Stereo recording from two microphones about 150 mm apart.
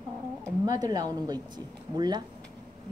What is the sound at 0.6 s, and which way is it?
A woman's voice, 25° right (ahead or behind).